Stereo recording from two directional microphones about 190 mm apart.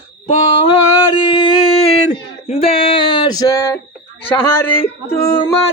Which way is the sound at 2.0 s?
35° left (ahead or behind).